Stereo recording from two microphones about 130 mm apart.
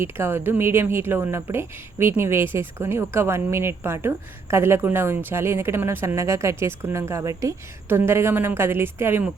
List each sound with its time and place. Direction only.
0.0 s speech: 20° right (ahead or behind)